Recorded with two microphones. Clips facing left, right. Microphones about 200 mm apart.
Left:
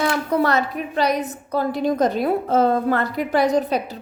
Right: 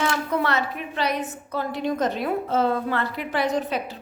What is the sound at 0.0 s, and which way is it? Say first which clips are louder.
A woman's voice: left 4 dB; 35° left (ahead or behind).